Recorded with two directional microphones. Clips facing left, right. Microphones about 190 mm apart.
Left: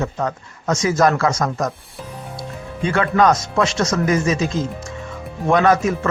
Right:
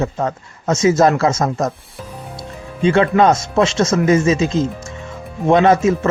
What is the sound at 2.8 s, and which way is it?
Speech, 25° right (ahead or behind).